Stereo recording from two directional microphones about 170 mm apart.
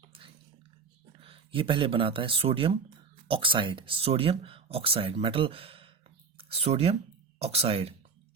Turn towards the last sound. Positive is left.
turn(degrees=-35)  # may be behind; listen again after turning